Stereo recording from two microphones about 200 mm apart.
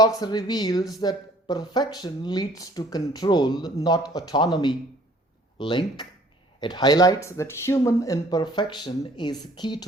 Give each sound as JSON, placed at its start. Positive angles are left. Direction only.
{"t": 0.0, "sound": "speech", "side_deg": 20}